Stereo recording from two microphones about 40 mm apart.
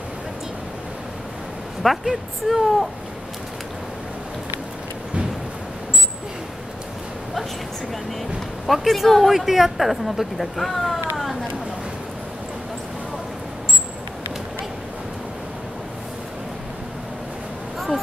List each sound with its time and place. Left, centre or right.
1.8 s speech: centre
8.6 s speech: centre
17.7 s a sound: centre